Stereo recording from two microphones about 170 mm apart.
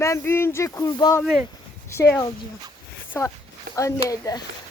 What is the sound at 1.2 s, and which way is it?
Speech, centre (ahead or behind).